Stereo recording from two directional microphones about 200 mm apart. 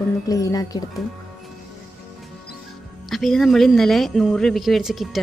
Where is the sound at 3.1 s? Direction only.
Centre (ahead or behind).